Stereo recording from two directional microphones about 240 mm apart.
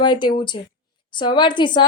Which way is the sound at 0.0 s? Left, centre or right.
Centre.